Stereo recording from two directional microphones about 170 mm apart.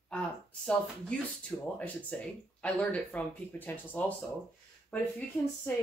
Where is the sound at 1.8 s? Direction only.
10° left (ahead or behind).